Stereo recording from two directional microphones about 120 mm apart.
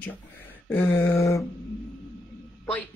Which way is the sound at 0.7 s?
20° left (ahead or behind).